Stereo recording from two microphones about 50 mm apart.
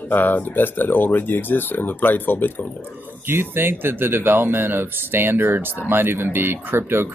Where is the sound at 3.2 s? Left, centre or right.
Right.